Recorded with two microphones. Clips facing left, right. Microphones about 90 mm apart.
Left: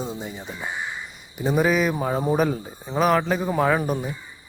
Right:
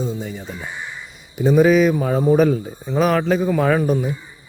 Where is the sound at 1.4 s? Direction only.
5° left (ahead or behind).